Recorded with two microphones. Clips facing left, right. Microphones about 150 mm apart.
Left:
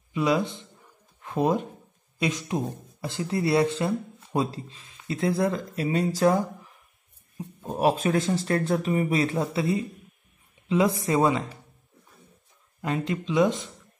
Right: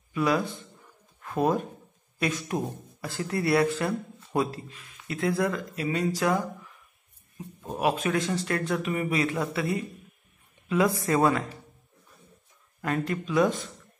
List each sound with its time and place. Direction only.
0.1 s speech: 20° left (ahead or behind)
7.7 s speech: 35° left (ahead or behind)
12.8 s speech: 20° left (ahead or behind)